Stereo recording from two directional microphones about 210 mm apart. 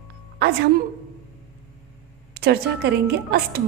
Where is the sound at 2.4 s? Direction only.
50° right (ahead or behind).